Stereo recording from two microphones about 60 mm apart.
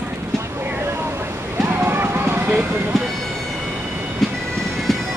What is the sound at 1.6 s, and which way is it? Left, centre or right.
Music, right.